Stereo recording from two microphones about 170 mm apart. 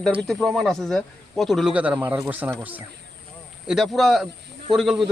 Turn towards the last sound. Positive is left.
turn(degrees=0)  # may be behind; listen again after turning